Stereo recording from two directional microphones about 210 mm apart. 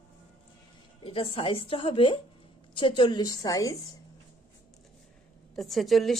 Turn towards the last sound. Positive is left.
turn(degrees=0)  # may be behind; listen again after turning